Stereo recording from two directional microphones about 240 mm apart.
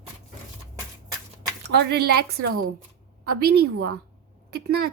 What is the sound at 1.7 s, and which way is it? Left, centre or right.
Speech, right.